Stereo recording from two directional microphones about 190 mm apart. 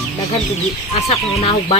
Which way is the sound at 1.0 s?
30° left (ahead or behind).